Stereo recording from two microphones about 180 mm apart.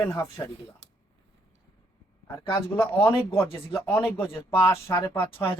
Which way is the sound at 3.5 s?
30° left (ahead or behind).